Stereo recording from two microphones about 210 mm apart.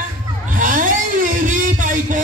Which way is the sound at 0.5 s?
40° right (ahead or behind).